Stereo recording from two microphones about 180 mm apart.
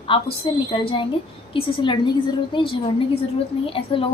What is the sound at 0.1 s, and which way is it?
A woman's voice, 30° left (ahead or behind).